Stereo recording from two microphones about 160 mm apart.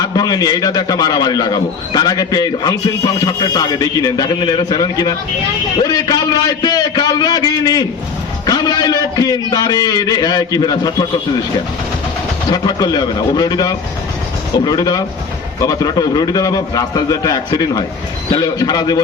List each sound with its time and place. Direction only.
0.0 s a man's voice: 25° left (ahead or behind)
12.5 s a man's voice: 25° left (ahead or behind)